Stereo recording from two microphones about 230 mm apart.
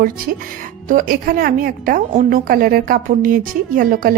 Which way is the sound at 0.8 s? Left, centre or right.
Right.